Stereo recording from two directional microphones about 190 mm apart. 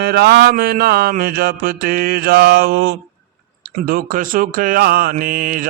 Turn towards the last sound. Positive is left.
turn(degrees=-45)  # may be behind; listen again after turning